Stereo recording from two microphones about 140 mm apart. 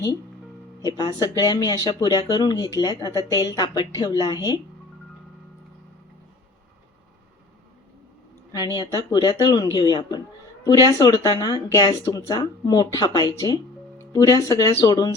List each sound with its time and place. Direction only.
0.8 s speech: 30° left (ahead or behind)
8.7 s speech: 30° left (ahead or behind)